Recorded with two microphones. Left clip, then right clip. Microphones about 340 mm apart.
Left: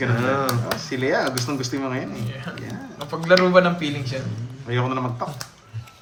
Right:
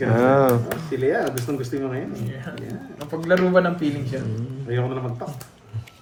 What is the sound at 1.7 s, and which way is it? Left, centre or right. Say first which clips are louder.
Speech: right 1 dB; left.